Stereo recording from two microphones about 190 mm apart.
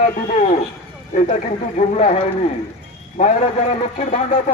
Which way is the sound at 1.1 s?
40° left (ahead or behind).